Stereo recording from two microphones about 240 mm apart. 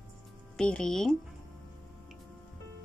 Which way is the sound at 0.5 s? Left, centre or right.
Centre.